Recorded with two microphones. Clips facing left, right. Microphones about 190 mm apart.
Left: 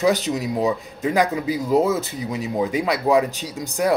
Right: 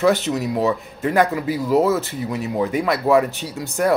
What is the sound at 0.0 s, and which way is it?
Speech, 15° left (ahead or behind).